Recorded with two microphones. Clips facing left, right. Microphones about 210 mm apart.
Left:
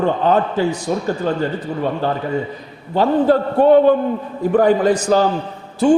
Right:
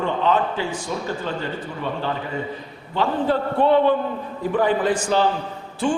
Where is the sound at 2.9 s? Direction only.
40° left (ahead or behind).